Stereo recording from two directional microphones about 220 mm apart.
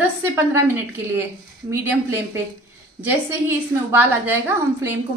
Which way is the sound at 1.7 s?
10° right (ahead or behind).